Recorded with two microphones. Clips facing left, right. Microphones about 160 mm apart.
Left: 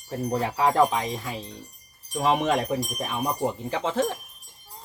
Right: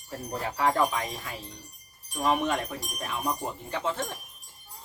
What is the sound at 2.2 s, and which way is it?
Wind chime, 90° left.